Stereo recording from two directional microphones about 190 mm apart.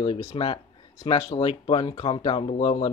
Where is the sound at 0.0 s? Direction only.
30° left (ahead or behind).